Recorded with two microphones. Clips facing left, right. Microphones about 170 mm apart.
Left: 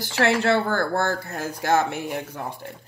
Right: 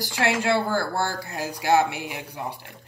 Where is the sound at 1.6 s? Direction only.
10° right (ahead or behind).